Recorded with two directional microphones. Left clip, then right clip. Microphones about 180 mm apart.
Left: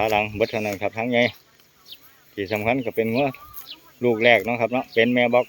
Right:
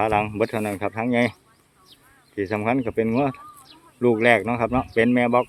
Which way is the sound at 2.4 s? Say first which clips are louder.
Even; 5° right (ahead or behind).